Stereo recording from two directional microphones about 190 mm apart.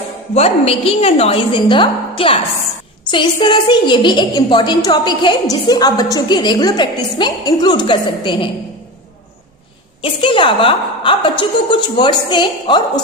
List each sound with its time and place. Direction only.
0.3 s a woman's voice: 30° left (ahead or behind)
10.0 s a woman's voice: 25° left (ahead or behind)